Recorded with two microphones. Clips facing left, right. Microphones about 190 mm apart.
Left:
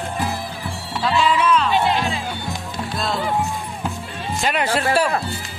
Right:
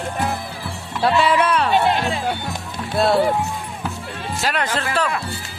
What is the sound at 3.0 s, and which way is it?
Speech, 65° right (ahead or behind).